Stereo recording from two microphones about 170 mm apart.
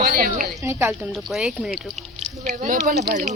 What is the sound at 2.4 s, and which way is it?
Speech, 50° right (ahead or behind).